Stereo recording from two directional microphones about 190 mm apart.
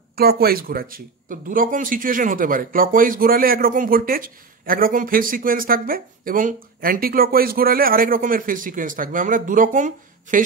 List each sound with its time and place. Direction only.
0.1 s speech: 55° right (ahead or behind)